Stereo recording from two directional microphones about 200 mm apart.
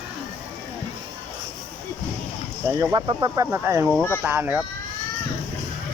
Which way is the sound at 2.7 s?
20° right (ahead or behind).